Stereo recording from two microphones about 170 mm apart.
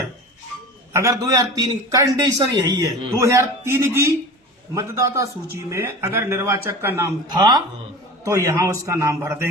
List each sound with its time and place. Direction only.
0.9 s a man's voice: 20° right (ahead or behind)
7.3 s a man's voice: 25° right (ahead or behind)